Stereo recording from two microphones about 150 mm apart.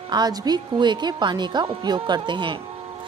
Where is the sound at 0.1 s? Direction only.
25° right (ahead or behind).